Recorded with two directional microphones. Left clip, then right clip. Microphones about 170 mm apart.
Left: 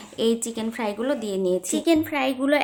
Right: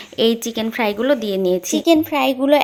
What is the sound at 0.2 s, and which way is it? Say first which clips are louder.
A woman's voice: right 6 dB; 30° right (ahead or behind).